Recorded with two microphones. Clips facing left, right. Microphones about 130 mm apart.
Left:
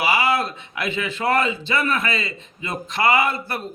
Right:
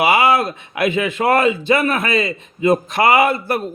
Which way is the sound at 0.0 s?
50° right (ahead or behind).